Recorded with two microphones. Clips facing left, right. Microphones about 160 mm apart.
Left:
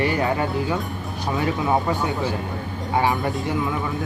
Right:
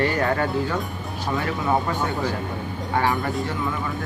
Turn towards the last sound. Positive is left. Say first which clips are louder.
# left 1 dB
turn(degrees=20)  # may be behind; listen again after turning